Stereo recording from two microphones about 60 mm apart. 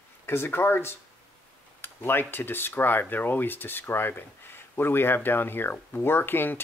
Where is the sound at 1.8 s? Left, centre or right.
Left.